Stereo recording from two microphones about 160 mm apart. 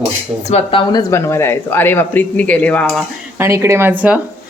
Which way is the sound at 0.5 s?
35° left (ahead or behind).